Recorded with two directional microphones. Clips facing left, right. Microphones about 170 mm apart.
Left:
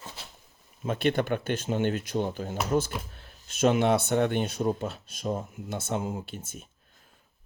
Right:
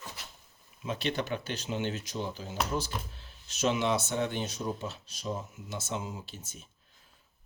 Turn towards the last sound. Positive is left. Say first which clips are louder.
# left 7 dB
turn(degrees=55)  # may be behind; listen again after turning